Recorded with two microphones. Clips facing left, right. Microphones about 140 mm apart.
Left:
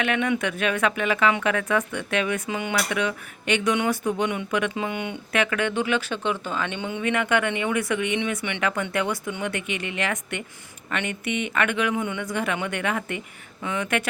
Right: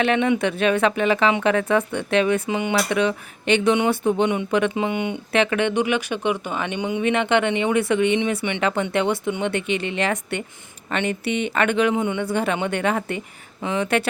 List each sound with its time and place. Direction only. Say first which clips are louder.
0.0 s speech: right 5 dB; 30° right (ahead or behind)